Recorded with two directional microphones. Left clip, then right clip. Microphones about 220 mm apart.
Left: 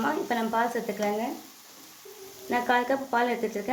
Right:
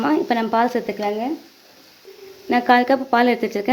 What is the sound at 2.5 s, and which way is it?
A woman's voice, 45° right (ahead or behind).